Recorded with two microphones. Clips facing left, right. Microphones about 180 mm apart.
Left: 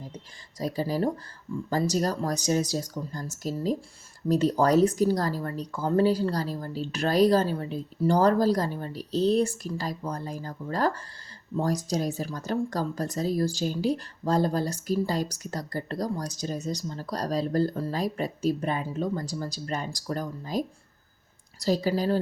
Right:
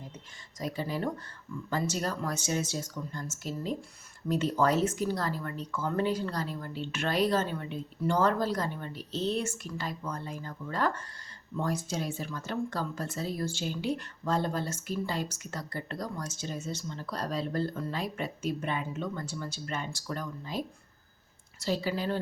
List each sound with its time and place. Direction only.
0.6 s speech: 35° left (ahead or behind)